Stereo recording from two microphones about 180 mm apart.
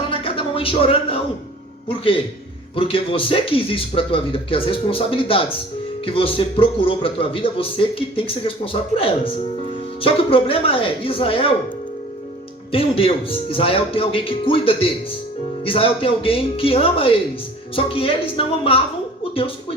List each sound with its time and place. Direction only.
0.1 s a sound: 30° left (ahead or behind)
2.7 s a man's voice: 30° left (ahead or behind)
12.7 s speech: 30° left (ahead or behind)